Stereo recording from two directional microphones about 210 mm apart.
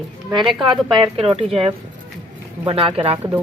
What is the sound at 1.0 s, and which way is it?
Speech, 25° right (ahead or behind).